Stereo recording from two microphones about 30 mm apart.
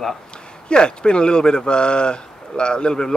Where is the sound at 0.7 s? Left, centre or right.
Left.